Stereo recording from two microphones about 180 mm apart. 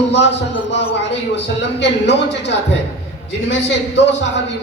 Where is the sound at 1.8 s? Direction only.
70° left (ahead or behind).